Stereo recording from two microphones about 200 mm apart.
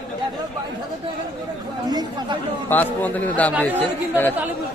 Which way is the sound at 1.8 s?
20° right (ahead or behind).